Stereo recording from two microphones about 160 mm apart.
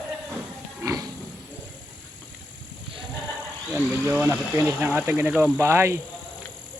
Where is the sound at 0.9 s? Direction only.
20° right (ahead or behind).